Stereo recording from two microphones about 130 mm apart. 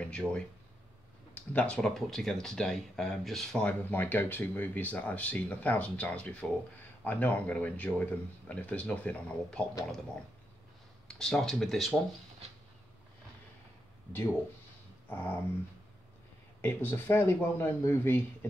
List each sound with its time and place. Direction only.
0.0 s speech: 10° left (ahead or behind)
11.1 s speech: 5° left (ahead or behind)
15.0 s a sound: 15° left (ahead or behind)
16.6 s speech: 15° left (ahead or behind)